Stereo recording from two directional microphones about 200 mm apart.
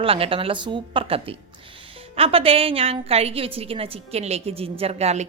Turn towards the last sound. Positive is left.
turn(degrees=-30)  # may be behind; listen again after turning